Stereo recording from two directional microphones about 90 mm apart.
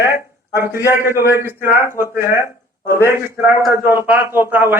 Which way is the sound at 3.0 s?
30° right (ahead or behind).